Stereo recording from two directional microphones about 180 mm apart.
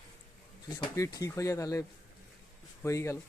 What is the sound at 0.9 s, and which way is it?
Speech, 20° left (ahead or behind).